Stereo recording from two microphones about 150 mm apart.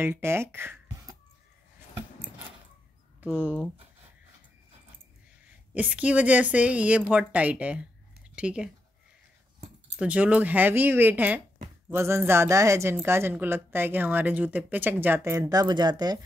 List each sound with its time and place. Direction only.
0.0 s speech: 15° right (ahead or behind)
3.2 s speech: 10° right (ahead or behind)
5.8 s speech: 10° right (ahead or behind)
9.9 s speech: 10° right (ahead or behind); by 16.2 s 25° right (ahead or behind)